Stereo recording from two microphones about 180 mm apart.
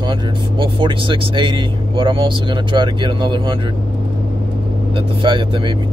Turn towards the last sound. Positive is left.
turn(degrees=-25)  # may be behind; listen again after turning